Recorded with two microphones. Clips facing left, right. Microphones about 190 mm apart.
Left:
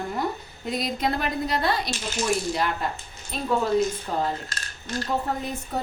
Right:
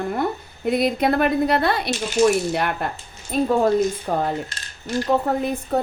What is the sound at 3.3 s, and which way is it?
A woman's voice, 50° right (ahead or behind).